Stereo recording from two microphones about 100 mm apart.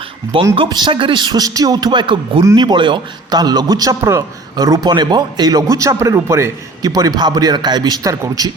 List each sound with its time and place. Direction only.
0.3 s a man's voice: 60° right (ahead or behind); by 8.1 s 45° right (ahead or behind)